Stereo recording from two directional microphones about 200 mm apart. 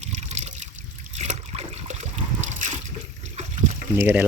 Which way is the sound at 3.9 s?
10° right (ahead or behind).